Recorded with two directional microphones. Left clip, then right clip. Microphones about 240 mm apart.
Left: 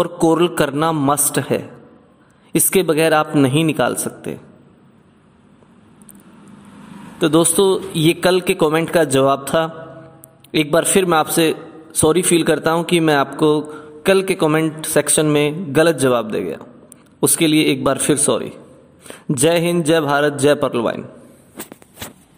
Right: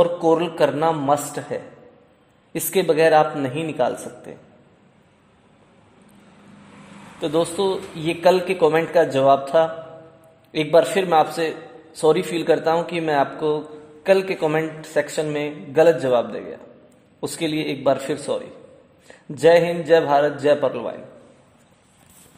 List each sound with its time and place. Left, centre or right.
0.0 s a man's voice: left
7.2 s a man's voice: left